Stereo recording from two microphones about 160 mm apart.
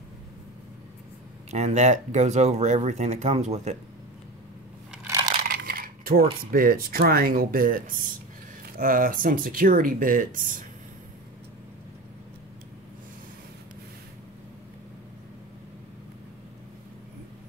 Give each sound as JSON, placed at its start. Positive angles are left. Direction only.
{"t": 1.5, "sound": "speech", "side_deg": -45}
{"t": 5.0, "sound": "crushing", "side_deg": -25}
{"t": 5.4, "sound": "coin", "side_deg": -70}
{"t": 6.5, "sound": "speech", "side_deg": -65}